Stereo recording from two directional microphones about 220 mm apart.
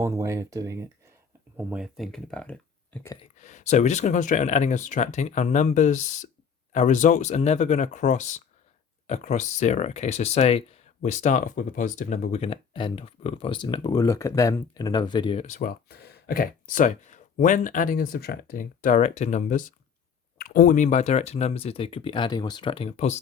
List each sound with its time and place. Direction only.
0.0 s speech: 15° right (ahead or behind)
1.5 s speech: 5° right (ahead or behind)
3.3 s speech: 30° left (ahead or behind)